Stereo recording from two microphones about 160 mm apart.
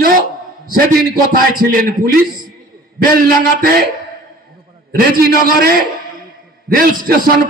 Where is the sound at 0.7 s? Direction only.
65° right (ahead or behind).